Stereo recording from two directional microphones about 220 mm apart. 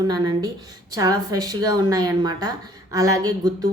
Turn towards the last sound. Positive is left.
turn(degrees=-15)  # may be behind; listen again after turning